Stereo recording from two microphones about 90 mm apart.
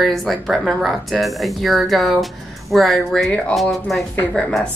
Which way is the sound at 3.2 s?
15° left (ahead or behind).